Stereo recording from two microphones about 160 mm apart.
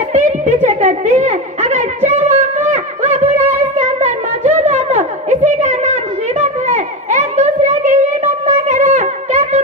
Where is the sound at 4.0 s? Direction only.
45° right (ahead or behind).